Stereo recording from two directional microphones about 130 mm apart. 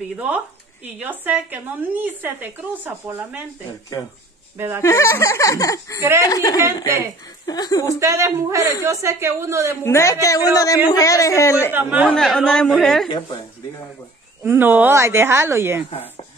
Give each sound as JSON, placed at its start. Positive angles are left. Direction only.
{"t": 0.9, "sound": "speech", "side_deg": -15}
{"t": 4.6, "sound": "speech", "side_deg": -20}
{"t": 4.8, "sound": "speech", "side_deg": 25}
{"t": 5.9, "sound": "speech", "side_deg": -20}
{"t": 6.2, "sound": "speech", "side_deg": 30}
{"t": 8.0, "sound": "speech", "side_deg": -25}
{"t": 9.8, "sound": "speech", "side_deg": 20}
{"t": 11.7, "sound": "speech", "side_deg": -15}
{"t": 12.1, "sound": "a woman's voice", "side_deg": 0}
{"t": 14.4, "sound": "speech", "side_deg": -15}